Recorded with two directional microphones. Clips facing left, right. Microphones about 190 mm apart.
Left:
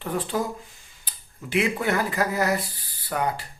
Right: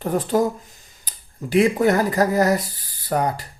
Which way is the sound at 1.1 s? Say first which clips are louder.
Right 7 dB; 40° right (ahead or behind).